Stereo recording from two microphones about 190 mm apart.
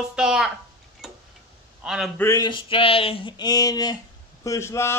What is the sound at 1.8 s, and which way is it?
Speech, centre (ahead or behind).